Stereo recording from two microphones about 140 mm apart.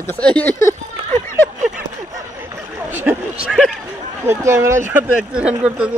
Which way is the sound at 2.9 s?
10° right (ahead or behind).